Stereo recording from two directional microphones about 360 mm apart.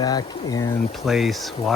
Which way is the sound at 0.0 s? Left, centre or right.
Centre.